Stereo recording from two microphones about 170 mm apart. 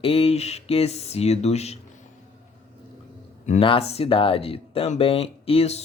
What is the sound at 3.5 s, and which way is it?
Speech, 35° left (ahead or behind).